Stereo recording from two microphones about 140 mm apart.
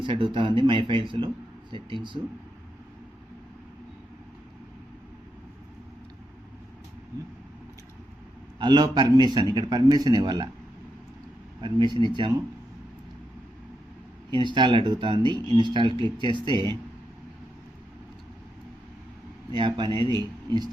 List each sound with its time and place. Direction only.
0.0 s speech: 35° right (ahead or behind)
8.5 s a man's voice: 30° right (ahead or behind)
11.6 s speech: 35° right (ahead or behind)
14.3 s speech: 35° right (ahead or behind)
19.5 s speech: 35° right (ahead or behind)